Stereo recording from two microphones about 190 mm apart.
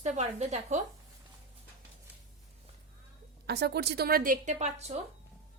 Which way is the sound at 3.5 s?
60° right (ahead or behind).